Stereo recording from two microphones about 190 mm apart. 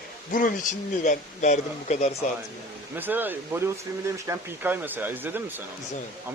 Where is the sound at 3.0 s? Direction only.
10° right (ahead or behind).